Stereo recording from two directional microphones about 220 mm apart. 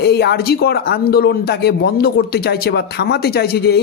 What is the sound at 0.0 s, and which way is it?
A man's voice, 50° left (ahead or behind).